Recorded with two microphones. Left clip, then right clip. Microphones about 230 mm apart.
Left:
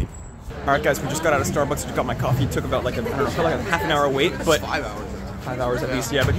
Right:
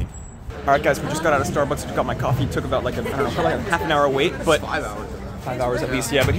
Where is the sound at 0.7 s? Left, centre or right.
Centre.